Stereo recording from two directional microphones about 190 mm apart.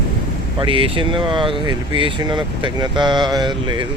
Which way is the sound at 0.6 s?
30° right (ahead or behind).